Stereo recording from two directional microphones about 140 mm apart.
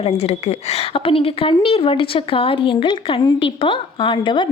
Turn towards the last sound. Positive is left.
turn(degrees=35)  # may be behind; listen again after turning